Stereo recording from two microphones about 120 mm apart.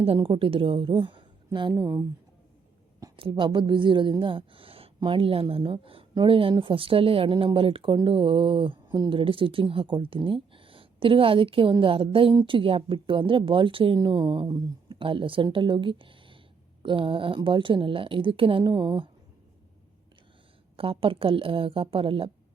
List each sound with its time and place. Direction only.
0.0 s speech: 50° right (ahead or behind)
1.7 s speech: 25° right (ahead or behind)
3.2 s speech: 45° right (ahead or behind)
20.7 s speech: 50° right (ahead or behind)